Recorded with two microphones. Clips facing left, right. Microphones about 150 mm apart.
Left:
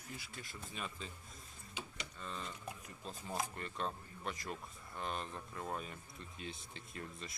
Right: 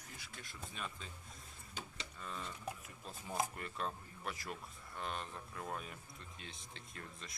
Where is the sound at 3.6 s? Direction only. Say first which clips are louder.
Left 1 dB; 5° right (ahead or behind).